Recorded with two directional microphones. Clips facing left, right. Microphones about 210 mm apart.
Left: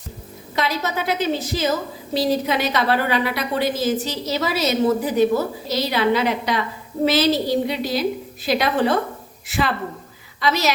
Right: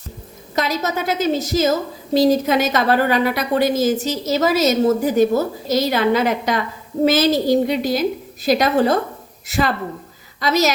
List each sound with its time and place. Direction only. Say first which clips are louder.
0.5 s a woman's voice: right 2 dB; 45° right (ahead or behind)